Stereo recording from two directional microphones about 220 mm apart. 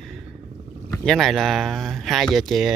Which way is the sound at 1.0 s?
Centre (ahead or behind).